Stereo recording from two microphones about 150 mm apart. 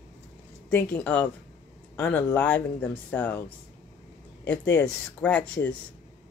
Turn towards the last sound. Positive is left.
turn(degrees=10)  # may be behind; listen again after turning